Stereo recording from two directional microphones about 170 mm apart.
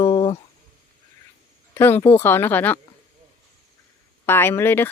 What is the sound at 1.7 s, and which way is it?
Speech, 15° left (ahead or behind).